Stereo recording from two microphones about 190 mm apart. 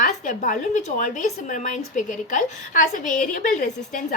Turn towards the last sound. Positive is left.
turn(degrees=45)  # may be behind; listen again after turning